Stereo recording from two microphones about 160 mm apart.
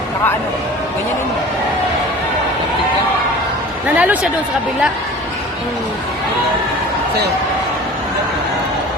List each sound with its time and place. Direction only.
3.9 s speech: 10° right (ahead or behind)